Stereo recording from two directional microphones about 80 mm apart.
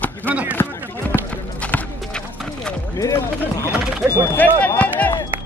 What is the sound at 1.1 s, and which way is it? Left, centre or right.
Clip-clop, left.